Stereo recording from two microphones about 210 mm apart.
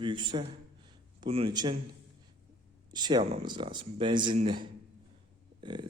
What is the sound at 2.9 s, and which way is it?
Speech, 20° right (ahead or behind).